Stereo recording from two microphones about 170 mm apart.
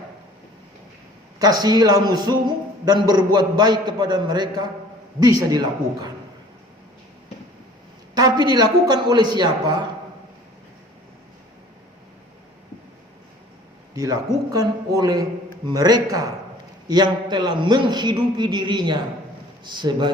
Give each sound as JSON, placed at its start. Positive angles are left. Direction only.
{"t": 1.4, "sound": "a man's voice", "side_deg": -20}
{"t": 8.1, "sound": "a man's voice", "side_deg": -25}
{"t": 13.9, "sound": "a man's voice", "side_deg": -20}